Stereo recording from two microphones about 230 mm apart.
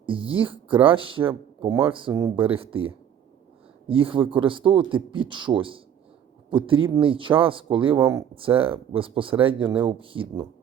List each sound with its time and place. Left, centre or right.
0.0 s speech: right